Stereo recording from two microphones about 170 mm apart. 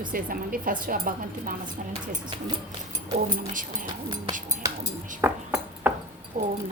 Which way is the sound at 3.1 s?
50° right (ahead or behind).